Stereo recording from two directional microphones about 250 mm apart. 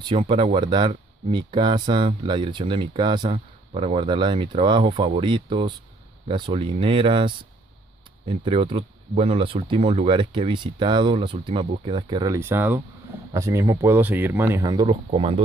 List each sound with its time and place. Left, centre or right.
0.0 s speech: centre